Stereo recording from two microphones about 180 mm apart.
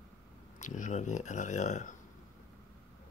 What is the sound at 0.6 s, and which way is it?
Speech, 45° left (ahead or behind).